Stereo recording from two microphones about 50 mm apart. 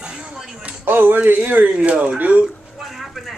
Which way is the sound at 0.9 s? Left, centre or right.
Right.